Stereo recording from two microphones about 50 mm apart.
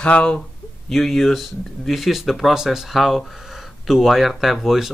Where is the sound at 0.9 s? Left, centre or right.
Centre.